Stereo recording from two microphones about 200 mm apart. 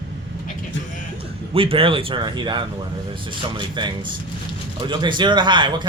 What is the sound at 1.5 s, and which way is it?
Speech, 25° right (ahead or behind).